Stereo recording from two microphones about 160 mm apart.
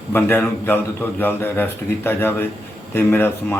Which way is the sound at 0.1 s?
15° left (ahead or behind).